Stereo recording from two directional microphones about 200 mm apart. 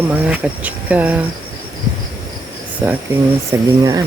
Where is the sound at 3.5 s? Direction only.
15° right (ahead or behind).